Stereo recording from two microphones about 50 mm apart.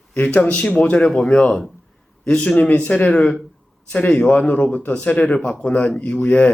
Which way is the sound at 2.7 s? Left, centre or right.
Left.